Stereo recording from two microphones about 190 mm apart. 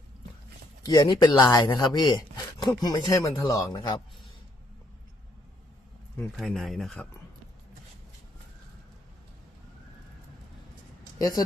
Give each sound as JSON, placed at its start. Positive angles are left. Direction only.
{"t": 0.9, "sound": "speech", "side_deg": 20}
{"t": 6.3, "sound": "speech", "side_deg": 0}
{"t": 11.2, "sound": "speech", "side_deg": 20}